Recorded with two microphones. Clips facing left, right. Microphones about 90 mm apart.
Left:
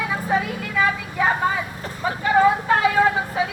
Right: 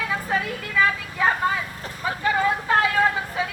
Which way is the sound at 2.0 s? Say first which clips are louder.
Left 5 dB; 20° left (ahead or behind).